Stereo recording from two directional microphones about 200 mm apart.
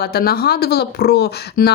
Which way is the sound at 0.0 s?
50° left (ahead or behind).